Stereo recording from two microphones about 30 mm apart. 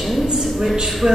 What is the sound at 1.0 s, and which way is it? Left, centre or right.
Speech, right.